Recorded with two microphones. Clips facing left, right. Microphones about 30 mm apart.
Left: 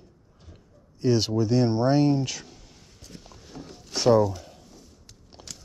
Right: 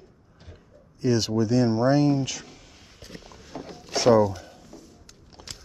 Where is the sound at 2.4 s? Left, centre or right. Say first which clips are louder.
Right 2 dB; right.